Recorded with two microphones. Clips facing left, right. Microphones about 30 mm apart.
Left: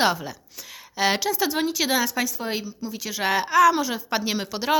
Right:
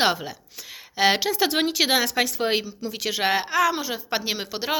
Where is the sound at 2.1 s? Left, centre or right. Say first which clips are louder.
Right 4 dB; right.